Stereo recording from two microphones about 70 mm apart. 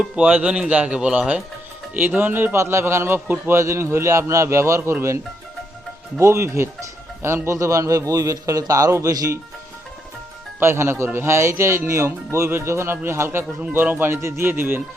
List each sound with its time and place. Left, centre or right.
0.2 s a man's voice: right
4.8 s speech: right
6.1 s a man's voice: right
7.6 s a man's voice: right
10.6 s speech: right
13.6 s speech: right